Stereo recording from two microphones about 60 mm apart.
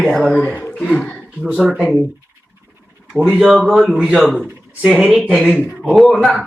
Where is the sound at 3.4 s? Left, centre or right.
Centre.